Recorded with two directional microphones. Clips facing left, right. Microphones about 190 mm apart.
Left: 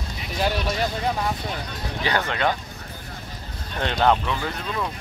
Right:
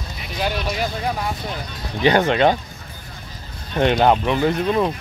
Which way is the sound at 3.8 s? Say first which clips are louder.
Right 5 dB; 15° right (ahead or behind).